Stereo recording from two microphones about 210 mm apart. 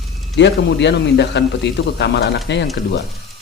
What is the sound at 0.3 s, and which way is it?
A man's voice, 55° left (ahead or behind).